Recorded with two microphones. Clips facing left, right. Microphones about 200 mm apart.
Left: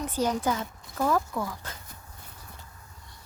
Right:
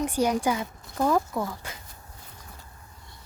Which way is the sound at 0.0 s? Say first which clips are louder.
Right 3 dB; 15° right (ahead or behind).